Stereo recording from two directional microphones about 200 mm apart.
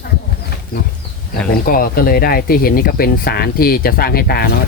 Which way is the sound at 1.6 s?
45° left (ahead or behind).